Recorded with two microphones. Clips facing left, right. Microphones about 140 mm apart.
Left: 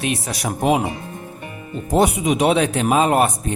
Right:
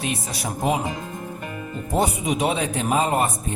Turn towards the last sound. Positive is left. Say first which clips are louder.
# left 5 dB
turn(degrees=75)  # may be behind; listen again after turning